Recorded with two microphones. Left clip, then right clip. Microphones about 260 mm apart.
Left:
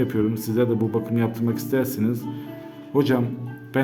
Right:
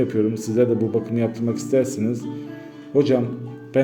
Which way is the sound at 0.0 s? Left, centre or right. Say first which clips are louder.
Right 3 dB; centre.